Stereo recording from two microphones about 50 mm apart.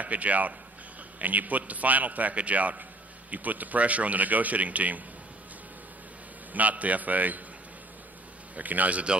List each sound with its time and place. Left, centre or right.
0.0 s a man's voice: right
6.5 s a man's voice: right
8.5 s a man's voice: right